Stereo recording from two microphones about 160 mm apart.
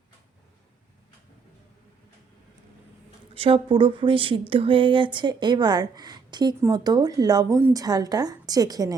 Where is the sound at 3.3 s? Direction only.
35° right (ahead or behind).